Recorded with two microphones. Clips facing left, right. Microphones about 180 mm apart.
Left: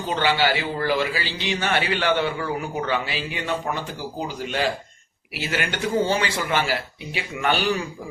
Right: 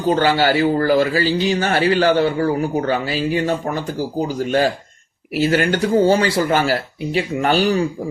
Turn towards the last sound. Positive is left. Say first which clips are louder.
# right 6 dB
turn(degrees=-35)  # may be behind; listen again after turning